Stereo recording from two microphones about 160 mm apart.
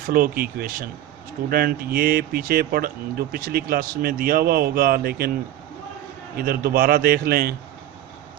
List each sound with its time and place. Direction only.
0.1 s speech: 65° right (ahead or behind)
6.3 s speech: 70° right (ahead or behind)